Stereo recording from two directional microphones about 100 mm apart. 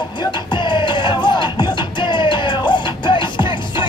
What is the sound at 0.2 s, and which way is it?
Music, 50° left (ahead or behind).